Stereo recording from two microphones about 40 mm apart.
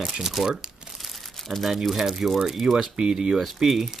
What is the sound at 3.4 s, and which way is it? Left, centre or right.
Speech, centre.